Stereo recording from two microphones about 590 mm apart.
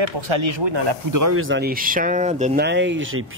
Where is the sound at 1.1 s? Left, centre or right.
Right.